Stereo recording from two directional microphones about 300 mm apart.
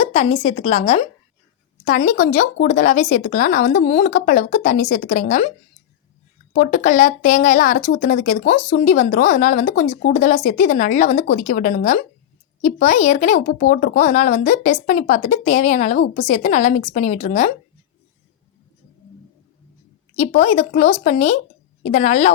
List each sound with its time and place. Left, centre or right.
0.0 s a woman's voice: left
6.5 s a woman's voice: left
20.1 s a woman's voice: left